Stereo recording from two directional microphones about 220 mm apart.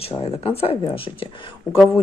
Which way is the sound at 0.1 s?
25° left (ahead or behind).